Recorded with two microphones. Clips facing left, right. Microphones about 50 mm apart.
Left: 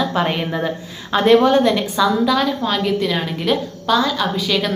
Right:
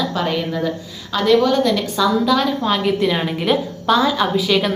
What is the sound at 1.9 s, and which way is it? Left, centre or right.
A woman's voice, centre.